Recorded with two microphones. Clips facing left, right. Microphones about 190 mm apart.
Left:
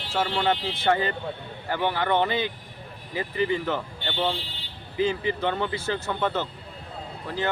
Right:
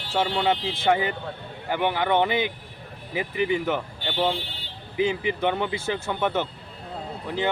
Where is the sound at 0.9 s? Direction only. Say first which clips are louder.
Right 1 dB; 15° right (ahead or behind).